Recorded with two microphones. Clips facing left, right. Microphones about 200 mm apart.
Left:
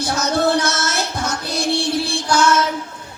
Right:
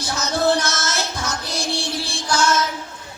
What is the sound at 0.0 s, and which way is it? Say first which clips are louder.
Music: left 3 dB; 60° left (ahead or behind).